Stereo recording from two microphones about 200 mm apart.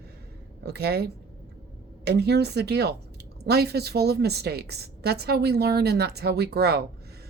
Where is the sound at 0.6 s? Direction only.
55° right (ahead or behind).